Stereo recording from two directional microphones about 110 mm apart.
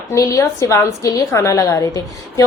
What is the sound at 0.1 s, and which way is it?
A woman's voice, 30° left (ahead or behind).